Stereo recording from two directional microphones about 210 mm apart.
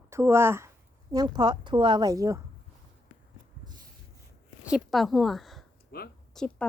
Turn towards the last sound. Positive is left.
turn(degrees=5)  # may be behind; listen again after turning